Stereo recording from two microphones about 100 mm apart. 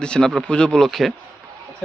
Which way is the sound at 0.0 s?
5° left (ahead or behind).